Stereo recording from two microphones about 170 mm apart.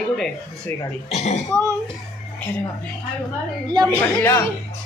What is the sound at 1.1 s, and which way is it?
Speech, 40° left (ahead or behind).